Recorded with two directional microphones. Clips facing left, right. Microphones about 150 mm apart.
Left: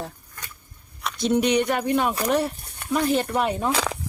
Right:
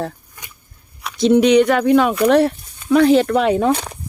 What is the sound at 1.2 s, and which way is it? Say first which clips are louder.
Speech: right 9 dB; 90° right.